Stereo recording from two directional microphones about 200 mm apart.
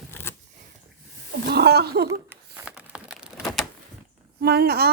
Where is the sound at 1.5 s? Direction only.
55° right (ahead or behind).